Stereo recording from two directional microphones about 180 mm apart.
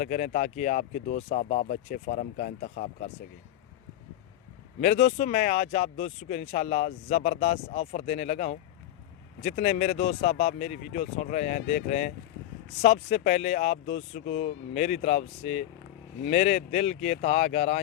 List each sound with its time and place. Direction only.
0.0 s speech: 45° left (ahead or behind)
4.8 s speech: 40° left (ahead or behind)